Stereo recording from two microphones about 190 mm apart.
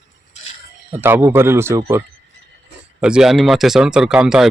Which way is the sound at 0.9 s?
10° right (ahead or behind).